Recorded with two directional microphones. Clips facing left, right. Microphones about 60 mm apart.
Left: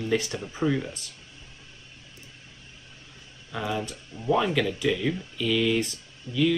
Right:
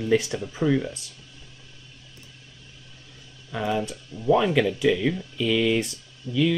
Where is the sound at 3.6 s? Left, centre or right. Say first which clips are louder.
Right 4 dB; right.